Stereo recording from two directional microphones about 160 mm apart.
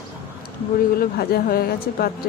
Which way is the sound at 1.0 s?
70° left (ahead or behind).